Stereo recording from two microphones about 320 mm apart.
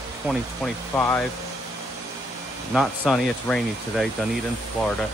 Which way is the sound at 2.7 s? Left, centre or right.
Centre.